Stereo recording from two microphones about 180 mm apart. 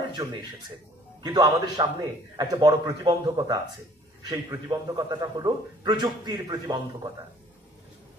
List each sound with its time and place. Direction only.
0.2 s a man's voice: 20° right (ahead or behind)